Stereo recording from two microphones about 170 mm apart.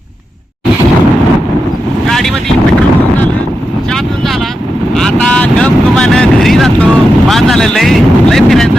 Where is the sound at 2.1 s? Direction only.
Centre (ahead or behind).